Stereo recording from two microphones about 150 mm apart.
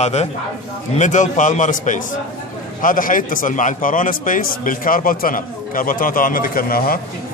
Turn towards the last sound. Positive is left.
turn(degrees=75)  # may be behind; listen again after turning